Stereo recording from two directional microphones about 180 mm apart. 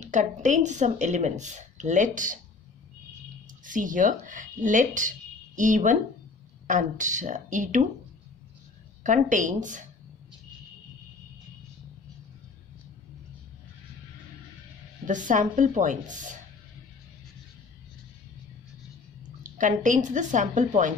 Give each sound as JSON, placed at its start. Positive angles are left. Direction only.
{"t": 0.0, "sound": "speech", "side_deg": -45}
{"t": 3.6, "sound": "speech", "side_deg": -45}
{"t": 9.0, "sound": "speech", "side_deg": -45}
{"t": 15.0, "sound": "speech", "side_deg": -45}
{"t": 19.4, "sound": "speech", "side_deg": -45}